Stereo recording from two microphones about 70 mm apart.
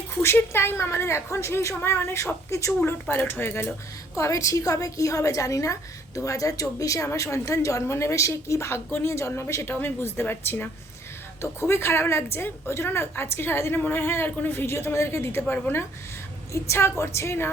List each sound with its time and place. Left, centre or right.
0.2 s a woman's voice: left
3.1 s a woman's voice: left
4.2 s a woman's voice: left
9.8 s a woman's voice: left
16.5 s a woman's voice: left